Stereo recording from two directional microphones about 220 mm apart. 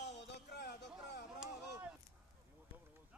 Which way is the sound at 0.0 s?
50° left (ahead or behind).